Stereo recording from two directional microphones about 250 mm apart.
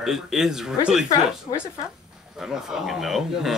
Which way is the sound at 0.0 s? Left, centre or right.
Centre.